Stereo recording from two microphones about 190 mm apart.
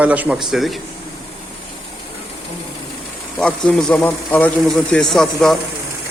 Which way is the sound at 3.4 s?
5° left (ahead or behind).